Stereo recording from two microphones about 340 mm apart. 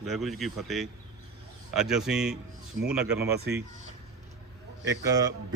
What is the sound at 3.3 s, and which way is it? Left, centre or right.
Speech, right.